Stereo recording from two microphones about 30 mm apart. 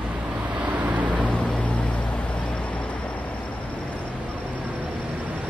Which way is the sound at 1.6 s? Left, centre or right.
Left.